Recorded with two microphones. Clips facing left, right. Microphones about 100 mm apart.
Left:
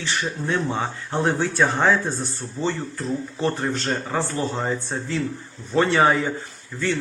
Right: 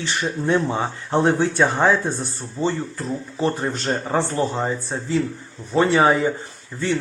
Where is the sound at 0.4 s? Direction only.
20° right (ahead or behind).